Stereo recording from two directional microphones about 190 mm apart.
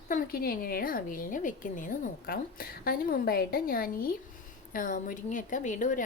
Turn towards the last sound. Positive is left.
turn(degrees=40)  # may be behind; listen again after turning